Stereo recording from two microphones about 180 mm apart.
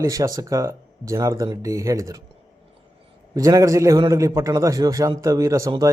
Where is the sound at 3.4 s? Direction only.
20° right (ahead or behind).